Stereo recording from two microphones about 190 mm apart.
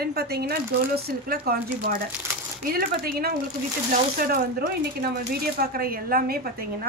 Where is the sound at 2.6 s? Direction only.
50° right (ahead or behind).